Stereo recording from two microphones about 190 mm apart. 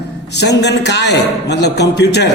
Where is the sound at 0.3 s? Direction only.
60° left (ahead or behind).